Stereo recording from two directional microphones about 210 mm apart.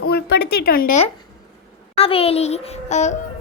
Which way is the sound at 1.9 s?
30° left (ahead or behind).